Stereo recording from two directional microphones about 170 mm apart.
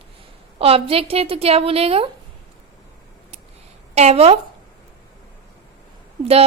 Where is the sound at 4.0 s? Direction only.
40° right (ahead or behind).